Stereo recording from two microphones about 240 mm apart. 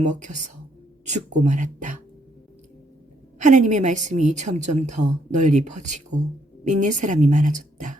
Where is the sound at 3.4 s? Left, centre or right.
Right.